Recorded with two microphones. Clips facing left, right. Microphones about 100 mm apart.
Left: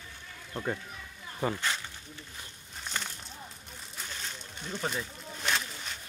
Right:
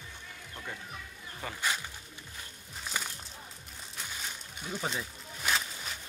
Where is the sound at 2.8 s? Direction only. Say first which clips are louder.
Even; 5° right (ahead or behind).